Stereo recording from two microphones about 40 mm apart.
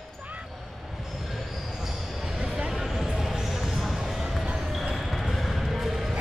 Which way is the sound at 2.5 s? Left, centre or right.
Right.